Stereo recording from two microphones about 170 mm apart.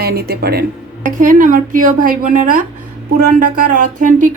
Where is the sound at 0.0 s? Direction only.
65° right (ahead or behind).